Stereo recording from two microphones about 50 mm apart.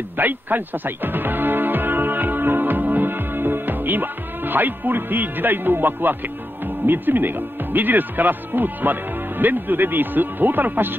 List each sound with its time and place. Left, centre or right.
0.2 s music: right
6.9 s speech: right